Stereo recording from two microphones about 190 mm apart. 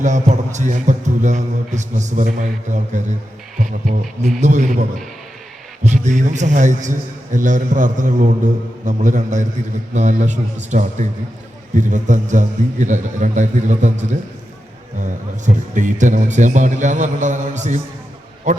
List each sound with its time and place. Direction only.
0.0 s a man's voice: 40° right (ahead or behind)
5.8 s a man's voice: 40° right (ahead or behind)
15.0 s a man's voice: 40° right (ahead or behind)